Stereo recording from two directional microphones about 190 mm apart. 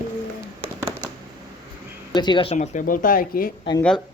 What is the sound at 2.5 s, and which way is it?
Speech, 40° left (ahead or behind).